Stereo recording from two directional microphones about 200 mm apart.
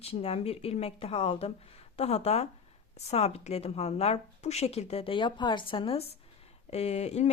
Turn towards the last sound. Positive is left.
turn(degrees=35)  # may be behind; listen again after turning